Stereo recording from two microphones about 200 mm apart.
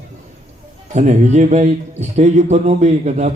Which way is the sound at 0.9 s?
35° right (ahead or behind).